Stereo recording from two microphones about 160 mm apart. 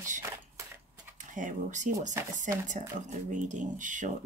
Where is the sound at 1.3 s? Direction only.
55° right (ahead or behind).